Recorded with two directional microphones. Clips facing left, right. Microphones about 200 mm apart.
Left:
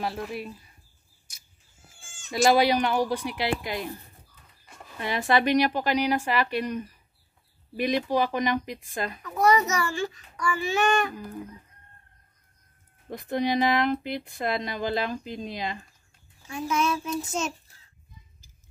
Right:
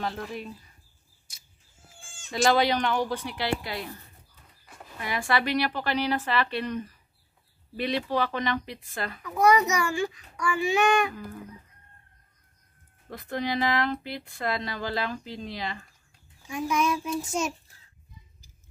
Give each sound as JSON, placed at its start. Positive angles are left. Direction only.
{"t": 0.0, "sound": "a woman's voice", "side_deg": 10}
{"t": 2.3, "sound": "a woman's voice", "side_deg": 10}
{"t": 5.0, "sound": "a woman's voice", "side_deg": 20}
{"t": 9.4, "sound": "a child's voice", "side_deg": -15}
{"t": 13.1, "sound": "speech", "side_deg": 20}
{"t": 16.4, "sound": "a child's voice", "side_deg": -15}